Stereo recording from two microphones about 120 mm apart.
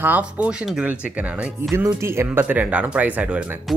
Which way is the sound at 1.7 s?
20° right (ahead or behind).